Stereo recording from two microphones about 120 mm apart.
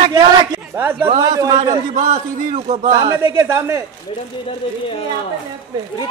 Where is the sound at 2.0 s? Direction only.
80° right.